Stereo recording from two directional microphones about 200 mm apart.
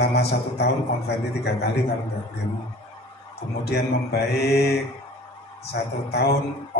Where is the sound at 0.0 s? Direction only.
55° left (ahead or behind).